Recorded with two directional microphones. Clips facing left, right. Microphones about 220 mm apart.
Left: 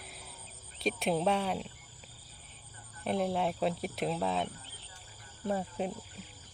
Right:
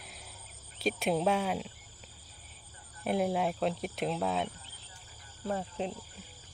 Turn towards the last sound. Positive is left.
turn(degrees=10)  # may be behind; listen again after turning